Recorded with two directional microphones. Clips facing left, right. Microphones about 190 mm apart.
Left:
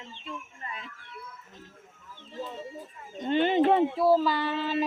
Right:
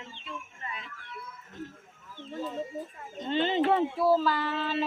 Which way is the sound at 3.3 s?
50° left (ahead or behind).